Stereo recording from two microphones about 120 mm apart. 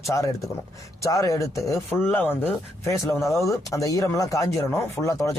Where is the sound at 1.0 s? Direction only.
25° left (ahead or behind).